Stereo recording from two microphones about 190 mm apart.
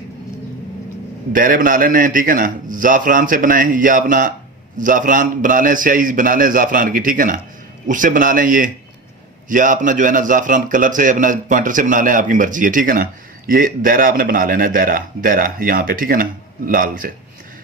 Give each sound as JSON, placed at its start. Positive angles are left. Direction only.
{"t": 1.3, "sound": "a man's voice", "side_deg": -45}